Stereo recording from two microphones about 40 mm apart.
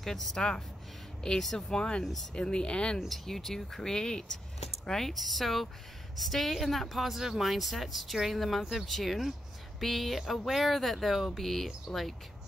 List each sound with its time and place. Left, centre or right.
0.0 s speech: centre
1.4 s a woman's voice: centre
1.7 s speech: left
3.3 s speech: centre
5.1 s a woman's voice: centre